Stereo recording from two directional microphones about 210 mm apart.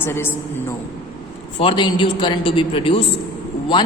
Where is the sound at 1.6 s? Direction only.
20° left (ahead or behind).